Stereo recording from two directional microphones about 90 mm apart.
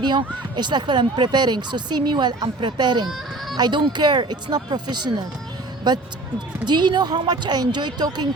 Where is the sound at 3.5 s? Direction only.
55° right (ahead or behind).